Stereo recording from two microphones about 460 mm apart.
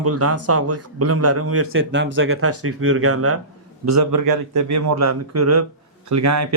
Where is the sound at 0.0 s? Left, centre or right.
Right.